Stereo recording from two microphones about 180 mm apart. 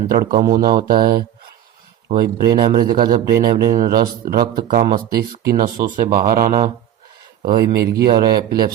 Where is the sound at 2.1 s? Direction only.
30° right (ahead or behind).